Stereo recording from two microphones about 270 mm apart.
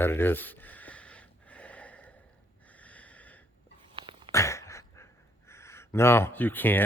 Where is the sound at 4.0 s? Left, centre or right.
Centre.